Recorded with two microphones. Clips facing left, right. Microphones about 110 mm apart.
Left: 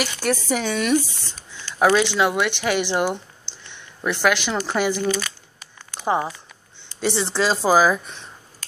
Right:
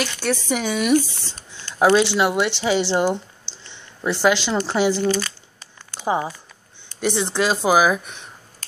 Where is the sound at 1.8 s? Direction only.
20° right (ahead or behind).